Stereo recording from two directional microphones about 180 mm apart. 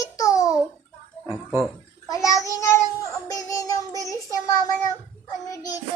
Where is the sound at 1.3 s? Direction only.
5° left (ahead or behind).